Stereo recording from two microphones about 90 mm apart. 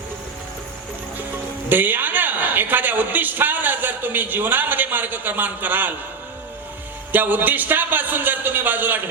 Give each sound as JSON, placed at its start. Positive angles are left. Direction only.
{"t": 1.7, "sound": "a man's voice", "side_deg": -20}
{"t": 7.1, "sound": "a man's voice", "side_deg": -20}